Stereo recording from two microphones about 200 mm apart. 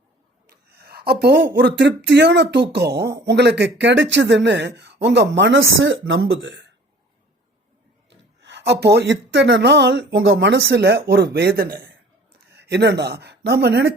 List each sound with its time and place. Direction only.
0.7 s speech: 50° right (ahead or behind)
8.4 s speech: 60° right (ahead or behind)
12.5 s speech: 60° right (ahead or behind)